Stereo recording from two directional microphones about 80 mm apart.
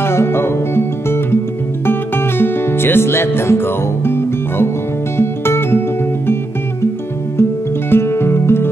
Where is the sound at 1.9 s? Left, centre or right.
Left.